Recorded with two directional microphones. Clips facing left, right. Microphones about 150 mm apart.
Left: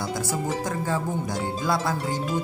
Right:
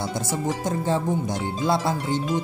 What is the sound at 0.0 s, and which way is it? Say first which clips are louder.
Music: right 1 dB; 25° right (ahead or behind).